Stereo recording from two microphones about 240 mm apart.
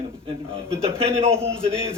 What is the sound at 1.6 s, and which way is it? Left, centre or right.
Speech, right.